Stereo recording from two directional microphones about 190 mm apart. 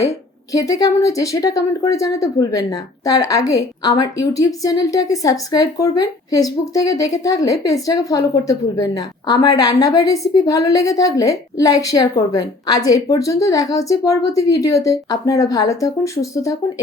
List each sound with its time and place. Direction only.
0.5 s speech: 20° left (ahead or behind)